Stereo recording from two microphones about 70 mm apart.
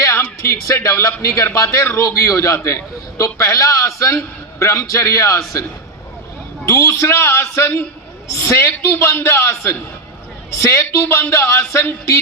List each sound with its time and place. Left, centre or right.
0.4 s a man's voice: left
6.7 s a man's voice: left